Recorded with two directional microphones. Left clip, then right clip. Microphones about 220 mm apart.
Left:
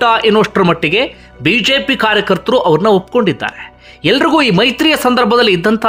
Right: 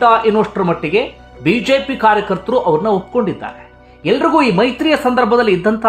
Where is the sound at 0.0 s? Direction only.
15° left (ahead or behind).